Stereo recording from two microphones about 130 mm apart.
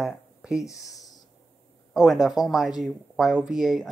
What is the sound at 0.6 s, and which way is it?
Speech, 25° left (ahead or behind).